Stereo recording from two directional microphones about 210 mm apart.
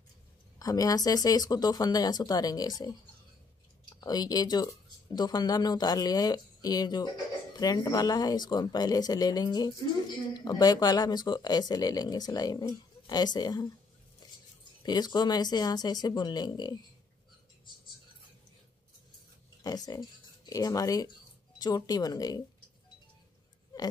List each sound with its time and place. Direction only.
0.6 s speech: 15° left (ahead or behind)
4.0 s speech: 20° left (ahead or behind)
14.8 s speech: 20° left (ahead or behind)
19.6 s speech: 20° left (ahead or behind)